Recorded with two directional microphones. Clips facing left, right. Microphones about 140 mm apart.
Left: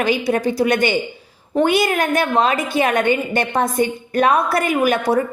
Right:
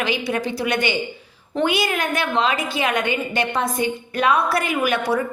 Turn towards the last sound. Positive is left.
turn(degrees=45)  # may be behind; listen again after turning